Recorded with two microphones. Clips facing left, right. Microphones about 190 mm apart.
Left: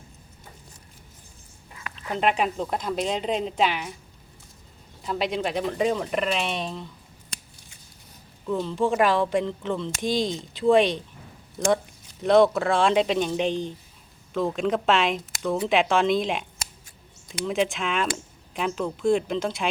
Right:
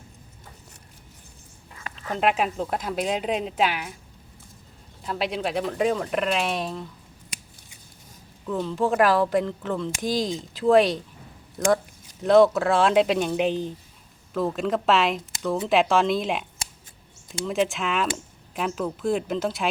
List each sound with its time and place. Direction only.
2.0 s a woman's voice: centre (ahead or behind)
5.0 s a woman's voice: centre (ahead or behind)
8.4 s a woman's voice: centre (ahead or behind)